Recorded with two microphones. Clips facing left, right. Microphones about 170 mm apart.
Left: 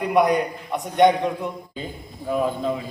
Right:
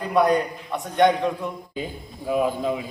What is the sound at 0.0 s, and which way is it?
A man's voice, 15° left (ahead or behind).